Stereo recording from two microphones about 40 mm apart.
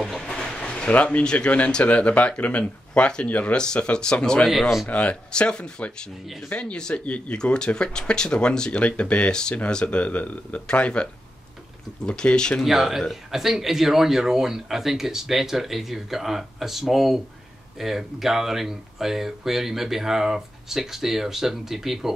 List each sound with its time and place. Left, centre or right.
0.2 s a sound: centre
1.2 s speech: left
3.3 s speech: left
3.5 s speech: left
4.5 s a man's voice: centre
4.8 s speech: left
5.3 s speech: left
12.1 s speech: left
12.6 s a man's voice: centre